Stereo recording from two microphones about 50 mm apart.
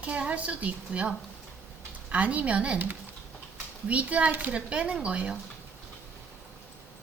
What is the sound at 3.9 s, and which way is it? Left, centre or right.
Speech, right.